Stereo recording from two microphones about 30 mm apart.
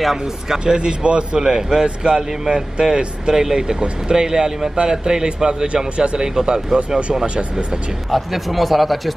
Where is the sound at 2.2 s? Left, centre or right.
Centre.